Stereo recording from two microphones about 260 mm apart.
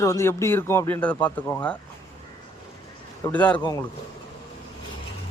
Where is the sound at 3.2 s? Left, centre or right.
Centre.